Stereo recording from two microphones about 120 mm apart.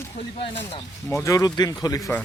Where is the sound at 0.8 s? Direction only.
25° left (ahead or behind).